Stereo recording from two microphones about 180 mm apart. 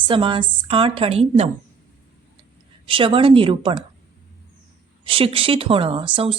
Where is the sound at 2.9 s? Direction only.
30° right (ahead or behind).